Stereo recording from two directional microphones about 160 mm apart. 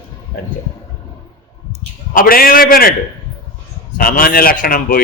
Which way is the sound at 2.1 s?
65° left (ahead or behind).